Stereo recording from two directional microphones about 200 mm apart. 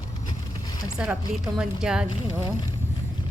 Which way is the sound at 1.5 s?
5° right (ahead or behind).